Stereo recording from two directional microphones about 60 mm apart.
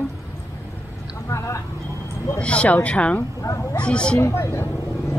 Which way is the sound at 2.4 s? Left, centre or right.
Centre.